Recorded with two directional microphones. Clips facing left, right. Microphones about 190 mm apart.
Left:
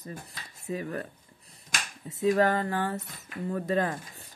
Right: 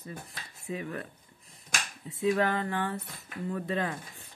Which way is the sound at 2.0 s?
40° left (ahead or behind).